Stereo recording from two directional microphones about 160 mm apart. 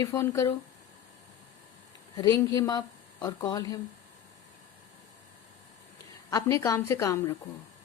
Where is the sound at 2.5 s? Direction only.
20° left (ahead or behind).